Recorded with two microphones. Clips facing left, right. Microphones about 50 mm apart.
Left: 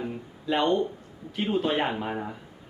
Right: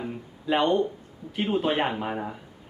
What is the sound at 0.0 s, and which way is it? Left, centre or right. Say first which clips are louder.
Music: even; centre.